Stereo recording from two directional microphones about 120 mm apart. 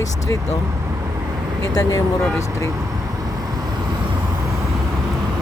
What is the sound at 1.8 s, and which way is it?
Speech, 25° left (ahead or behind).